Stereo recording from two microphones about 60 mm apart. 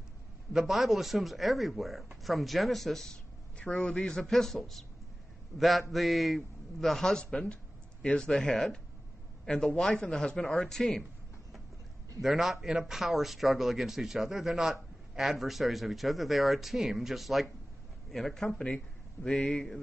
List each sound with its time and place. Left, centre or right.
0.5 s a man's voice: centre
9.8 s a man's voice: centre
12.2 s speech: centre
18.5 s a man's voice: centre
19.3 s a man's voice: centre